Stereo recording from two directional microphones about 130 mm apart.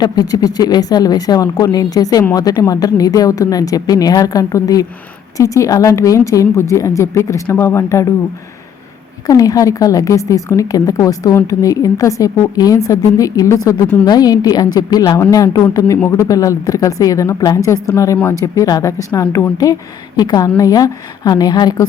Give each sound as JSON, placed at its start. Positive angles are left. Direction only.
{"t": 0.0, "sound": "a woman's voice", "side_deg": 30}
{"t": 9.2, "sound": "a woman's voice", "side_deg": 30}